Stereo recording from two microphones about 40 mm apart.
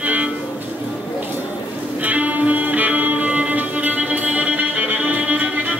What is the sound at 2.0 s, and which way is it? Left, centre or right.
Music, right.